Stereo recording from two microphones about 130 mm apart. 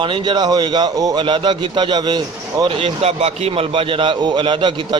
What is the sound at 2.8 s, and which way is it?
A man's voice, 50° right (ahead or behind).